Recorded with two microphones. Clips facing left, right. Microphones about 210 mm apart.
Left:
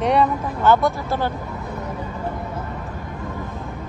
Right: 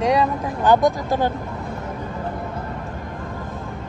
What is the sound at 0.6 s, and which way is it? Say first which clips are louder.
Speech: right 1 dB; 15° right (ahead or behind).